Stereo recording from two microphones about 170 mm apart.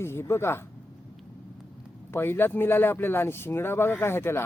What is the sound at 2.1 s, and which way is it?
Speech, 15° left (ahead or behind).